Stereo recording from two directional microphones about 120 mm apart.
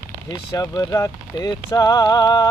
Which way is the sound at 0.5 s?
30° left (ahead or behind).